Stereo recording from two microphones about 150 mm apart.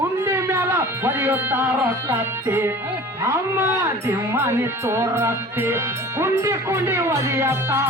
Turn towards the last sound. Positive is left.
turn(degrees=-20)  # may be behind; listen again after turning